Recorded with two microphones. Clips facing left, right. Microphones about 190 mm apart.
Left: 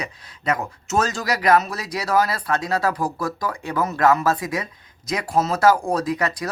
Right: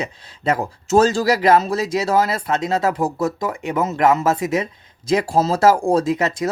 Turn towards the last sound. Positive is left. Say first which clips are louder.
# right 4 dB
turn(degrees=-25)  # may be behind; listen again after turning